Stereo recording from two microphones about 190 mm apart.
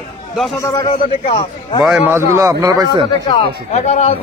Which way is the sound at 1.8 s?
5° right (ahead or behind).